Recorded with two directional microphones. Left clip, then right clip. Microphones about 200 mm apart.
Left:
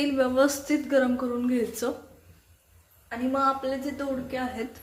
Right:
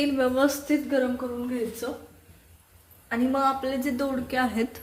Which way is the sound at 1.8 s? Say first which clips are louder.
Left 3 dB; 35° left (ahead or behind).